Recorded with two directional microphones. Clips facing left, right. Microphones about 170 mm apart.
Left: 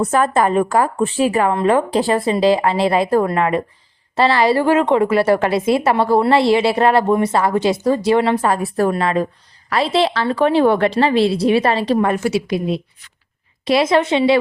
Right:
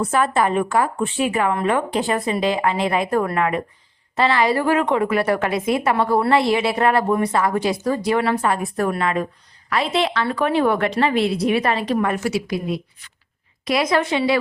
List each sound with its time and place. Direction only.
0.0 s a woman's voice: 45° left (ahead or behind); by 14.3 s 25° left (ahead or behind)